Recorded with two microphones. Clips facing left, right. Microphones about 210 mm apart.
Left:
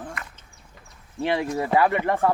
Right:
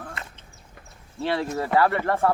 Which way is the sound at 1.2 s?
15° left (ahead or behind).